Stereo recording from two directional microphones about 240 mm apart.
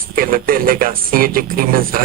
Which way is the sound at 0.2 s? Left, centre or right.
Right.